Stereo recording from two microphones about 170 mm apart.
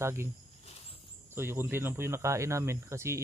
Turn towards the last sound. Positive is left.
turn(degrees=-15)  # may be behind; listen again after turning